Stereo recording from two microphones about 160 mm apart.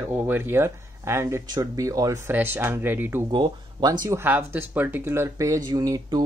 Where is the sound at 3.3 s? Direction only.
25° right (ahead or behind).